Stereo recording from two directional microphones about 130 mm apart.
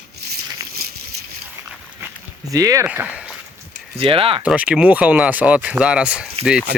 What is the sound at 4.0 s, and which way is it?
Speech, 45° right (ahead or behind).